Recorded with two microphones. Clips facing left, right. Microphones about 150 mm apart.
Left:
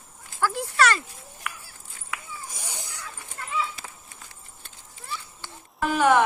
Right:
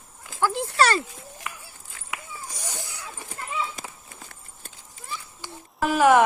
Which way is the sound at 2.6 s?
15° left (ahead or behind).